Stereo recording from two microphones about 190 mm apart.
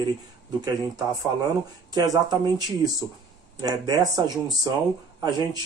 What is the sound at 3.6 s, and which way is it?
Speech, 20° right (ahead or behind).